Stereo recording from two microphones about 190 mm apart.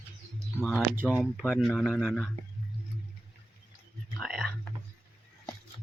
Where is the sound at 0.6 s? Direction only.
Centre (ahead or behind).